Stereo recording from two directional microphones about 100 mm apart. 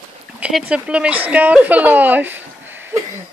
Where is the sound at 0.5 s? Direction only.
10° right (ahead or behind).